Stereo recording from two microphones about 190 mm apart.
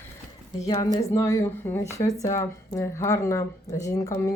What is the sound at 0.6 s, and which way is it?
Speech, 20° left (ahead or behind).